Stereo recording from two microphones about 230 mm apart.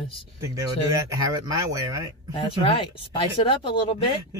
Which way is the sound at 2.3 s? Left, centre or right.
Left.